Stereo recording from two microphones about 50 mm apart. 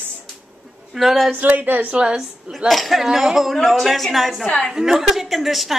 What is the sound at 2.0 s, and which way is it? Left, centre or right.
Speech, centre.